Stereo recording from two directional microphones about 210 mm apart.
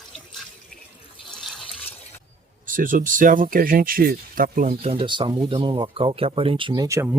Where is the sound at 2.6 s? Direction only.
40° right (ahead or behind).